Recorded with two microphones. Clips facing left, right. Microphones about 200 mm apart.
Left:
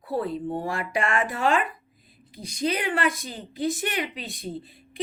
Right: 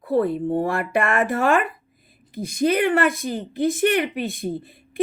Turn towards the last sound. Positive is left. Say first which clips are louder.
# right 8 dB
turn(degrees=-55)  # may be behind; listen again after turning